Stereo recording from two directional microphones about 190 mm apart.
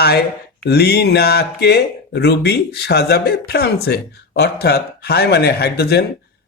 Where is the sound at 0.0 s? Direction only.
55° left (ahead or behind).